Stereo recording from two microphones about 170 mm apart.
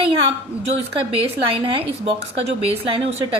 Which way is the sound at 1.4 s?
30° right (ahead or behind).